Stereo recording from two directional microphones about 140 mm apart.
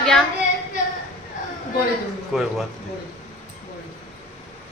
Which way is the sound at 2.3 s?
5° right (ahead or behind).